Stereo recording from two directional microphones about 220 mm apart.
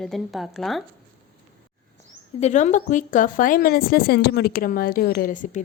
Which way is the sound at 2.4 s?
35° left (ahead or behind).